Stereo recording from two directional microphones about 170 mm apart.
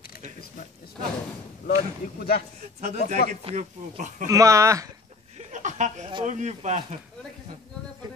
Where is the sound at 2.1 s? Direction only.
60° left (ahead or behind).